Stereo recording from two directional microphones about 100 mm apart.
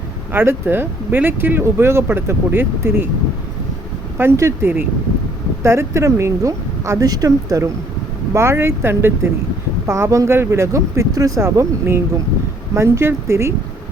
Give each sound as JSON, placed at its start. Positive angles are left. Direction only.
{"t": 0.3, "sound": "speech", "side_deg": -20}
{"t": 4.2, "sound": "speech", "side_deg": -25}